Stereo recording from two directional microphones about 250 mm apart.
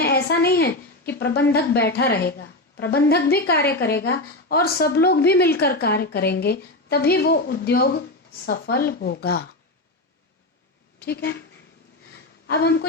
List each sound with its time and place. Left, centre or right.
0.0 s a woman's voice: left
11.0 s a woman's voice: left
12.5 s a woman's voice: left